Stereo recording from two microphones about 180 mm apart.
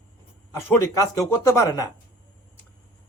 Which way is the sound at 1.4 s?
15° left (ahead or behind).